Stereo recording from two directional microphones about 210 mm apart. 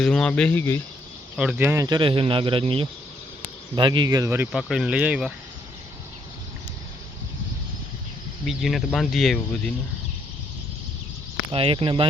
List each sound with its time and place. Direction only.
0.0 s speech: 5° left (ahead or behind)
1.4 s speech: 5° right (ahead or behind)
8.4 s speech: centre (ahead or behind)
11.5 s speech: 25° right (ahead or behind)